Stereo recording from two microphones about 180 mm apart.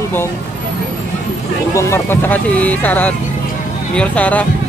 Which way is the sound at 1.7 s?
15° left (ahead or behind).